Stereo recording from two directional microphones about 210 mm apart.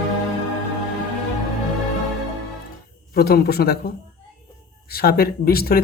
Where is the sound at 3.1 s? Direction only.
45° left (ahead or behind).